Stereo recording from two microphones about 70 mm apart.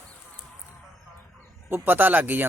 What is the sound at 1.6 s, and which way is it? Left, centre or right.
Speech, right.